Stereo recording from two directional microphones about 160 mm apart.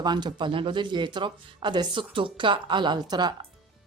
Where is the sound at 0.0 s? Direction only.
25° right (ahead or behind).